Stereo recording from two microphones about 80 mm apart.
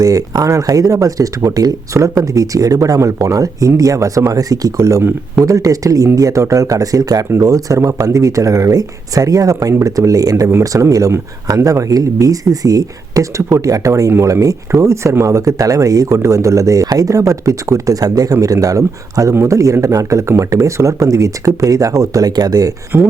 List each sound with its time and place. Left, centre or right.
0.0 s speech: right
4.8 s speech: right
7.3 s speech: right
14.1 s speech: right
22.9 s speech: right